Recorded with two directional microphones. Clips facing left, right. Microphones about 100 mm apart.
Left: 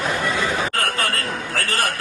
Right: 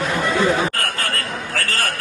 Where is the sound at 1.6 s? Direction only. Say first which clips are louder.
Left 1 dB; 20° left (ahead or behind).